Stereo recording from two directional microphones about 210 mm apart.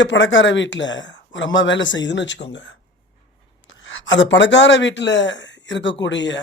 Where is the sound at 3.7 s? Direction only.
65° left (ahead or behind).